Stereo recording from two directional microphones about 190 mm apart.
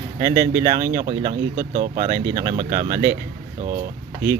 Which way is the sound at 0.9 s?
35° right (ahead or behind).